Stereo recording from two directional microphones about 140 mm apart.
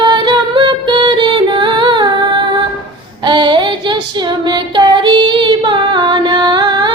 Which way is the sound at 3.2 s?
35° right (ahead or behind).